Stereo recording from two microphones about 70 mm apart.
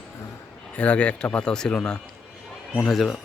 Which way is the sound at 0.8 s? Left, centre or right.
Centre.